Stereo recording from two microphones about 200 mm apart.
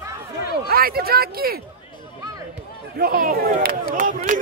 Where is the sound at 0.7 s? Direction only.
50° right (ahead or behind).